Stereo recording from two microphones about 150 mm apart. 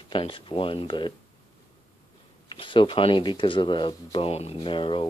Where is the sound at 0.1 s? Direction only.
35° left (ahead or behind).